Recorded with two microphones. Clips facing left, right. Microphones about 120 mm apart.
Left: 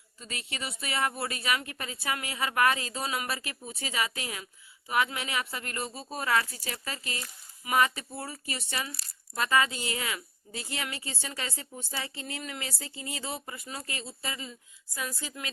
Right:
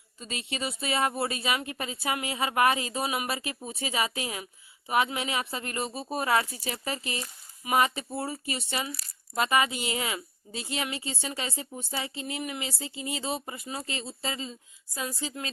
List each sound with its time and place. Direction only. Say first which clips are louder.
0.2 s speech: right 5 dB; 20° right (ahead or behind)